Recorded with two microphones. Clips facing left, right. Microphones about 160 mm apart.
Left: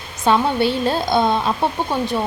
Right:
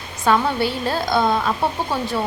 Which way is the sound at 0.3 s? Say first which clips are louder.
Left 2 dB; 25° left (ahead or behind).